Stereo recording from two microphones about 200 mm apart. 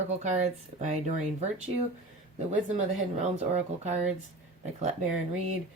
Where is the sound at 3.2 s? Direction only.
35° right (ahead or behind).